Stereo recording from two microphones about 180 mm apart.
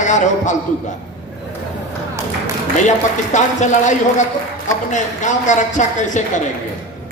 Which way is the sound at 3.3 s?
40° left (ahead or behind).